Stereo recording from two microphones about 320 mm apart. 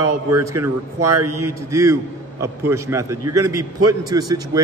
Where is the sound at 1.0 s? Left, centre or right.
Right.